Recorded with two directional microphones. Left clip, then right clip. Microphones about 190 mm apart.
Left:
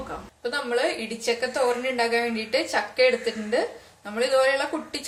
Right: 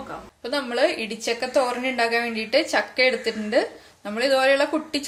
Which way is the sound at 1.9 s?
50° right (ahead or behind).